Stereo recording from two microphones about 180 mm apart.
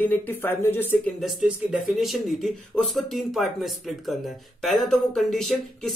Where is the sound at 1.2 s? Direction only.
Centre (ahead or behind).